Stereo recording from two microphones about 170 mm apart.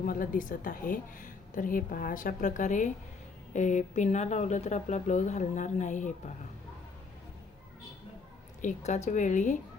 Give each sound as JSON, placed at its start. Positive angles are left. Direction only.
{"t": 0.0, "sound": "a woman's voice", "side_deg": 55}
{"t": 8.6, "sound": "a woman's voice", "side_deg": 45}